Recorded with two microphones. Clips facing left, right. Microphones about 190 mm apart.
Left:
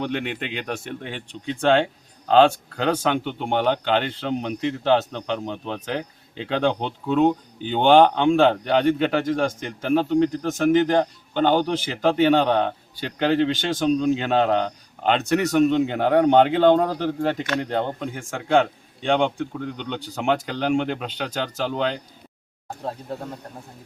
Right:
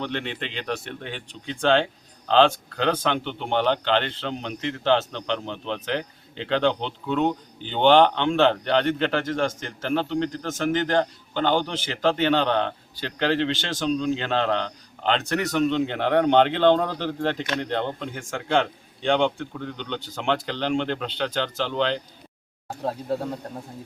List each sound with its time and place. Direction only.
0.0 s speech: 10° left (ahead or behind)